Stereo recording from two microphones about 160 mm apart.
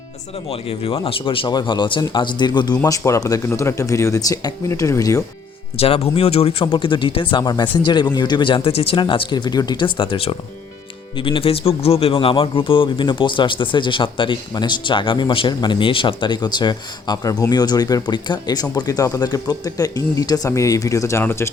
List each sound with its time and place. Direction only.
0.4 s speech: 35° left (ahead or behind); by 5.2 s 20° left (ahead or behind)
5.7 s a man's voice: 40° left (ahead or behind); by 21.5 s 15° left (ahead or behind)